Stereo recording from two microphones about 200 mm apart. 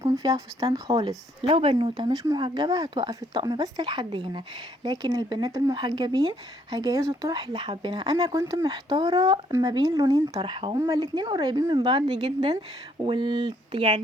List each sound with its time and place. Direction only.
0.0 s speech: 20° right (ahead or behind)